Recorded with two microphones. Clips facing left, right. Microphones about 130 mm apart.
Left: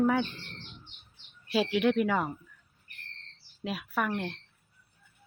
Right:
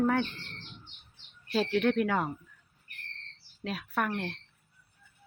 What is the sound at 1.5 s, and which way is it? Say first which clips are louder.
Speech: left 1 dB; 5° left (ahead or behind).